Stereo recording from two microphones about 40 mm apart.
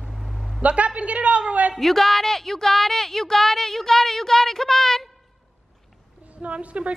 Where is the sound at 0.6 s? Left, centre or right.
Right.